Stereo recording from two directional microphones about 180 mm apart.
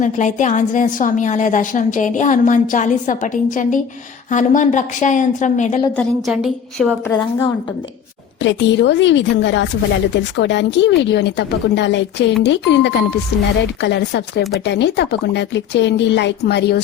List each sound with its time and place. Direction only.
0.0 s a woman's voice: 45° left (ahead or behind)
6.0 s a woman's voice: centre (ahead or behind)
8.4 s a woman's voice: 80° left